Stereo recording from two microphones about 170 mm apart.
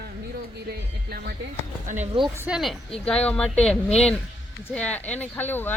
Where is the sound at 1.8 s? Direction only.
45° right (ahead or behind).